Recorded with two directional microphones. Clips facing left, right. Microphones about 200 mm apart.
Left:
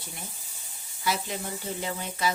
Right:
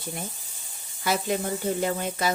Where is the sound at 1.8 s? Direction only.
50° right (ahead or behind).